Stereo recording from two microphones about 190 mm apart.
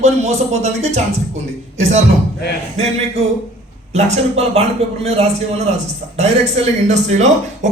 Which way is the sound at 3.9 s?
35° right (ahead or behind).